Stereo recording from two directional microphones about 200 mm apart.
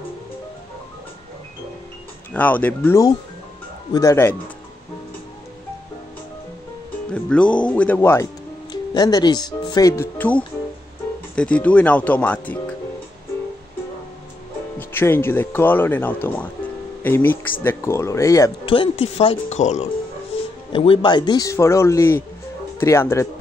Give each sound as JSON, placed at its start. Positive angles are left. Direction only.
{"t": 2.3, "sound": "speech", "side_deg": 10}
{"t": 7.1, "sound": "speech", "side_deg": 5}
{"t": 14.8, "sound": "speech", "side_deg": 10}